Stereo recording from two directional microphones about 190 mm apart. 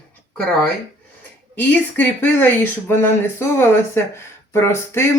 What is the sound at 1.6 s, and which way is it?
Speech, 10° left (ahead or behind).